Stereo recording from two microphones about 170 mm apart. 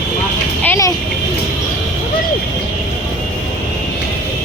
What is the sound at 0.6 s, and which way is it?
Vehicle, 15° left (ahead or behind).